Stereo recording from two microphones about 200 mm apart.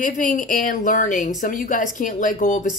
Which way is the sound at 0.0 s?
40° left (ahead or behind).